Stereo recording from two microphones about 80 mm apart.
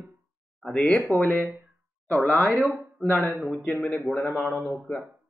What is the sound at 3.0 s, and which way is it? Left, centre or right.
Speech, centre.